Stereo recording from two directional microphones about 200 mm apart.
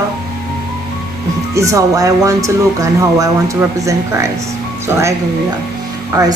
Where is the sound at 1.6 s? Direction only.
15° right (ahead or behind).